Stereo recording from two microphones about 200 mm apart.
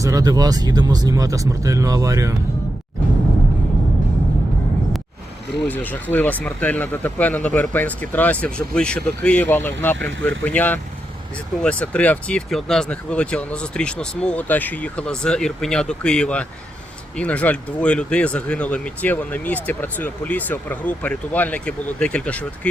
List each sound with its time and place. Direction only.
0.0 s speech: 15° right (ahead or behind)
5.6 s speech: 10° left (ahead or behind)